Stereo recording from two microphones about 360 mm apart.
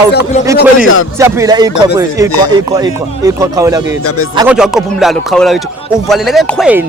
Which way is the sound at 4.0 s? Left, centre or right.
Left.